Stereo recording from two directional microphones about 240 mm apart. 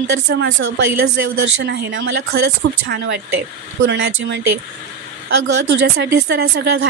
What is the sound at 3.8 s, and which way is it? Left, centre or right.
Speech, right.